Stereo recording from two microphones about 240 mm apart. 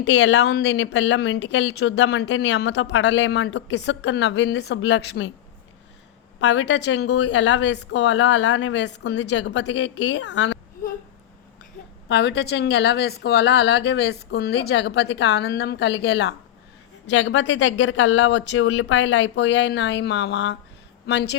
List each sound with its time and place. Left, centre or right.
0.0 s a woman's voice: left
6.4 s a woman's voice: left
12.0 s a woman's voice: left